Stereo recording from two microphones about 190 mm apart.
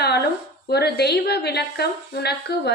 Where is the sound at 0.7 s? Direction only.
60° left (ahead or behind).